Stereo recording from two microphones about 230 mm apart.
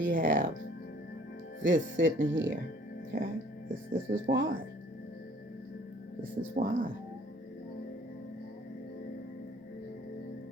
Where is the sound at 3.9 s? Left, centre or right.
Right.